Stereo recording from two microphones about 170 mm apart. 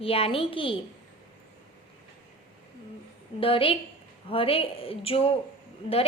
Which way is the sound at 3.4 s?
35° left (ahead or behind).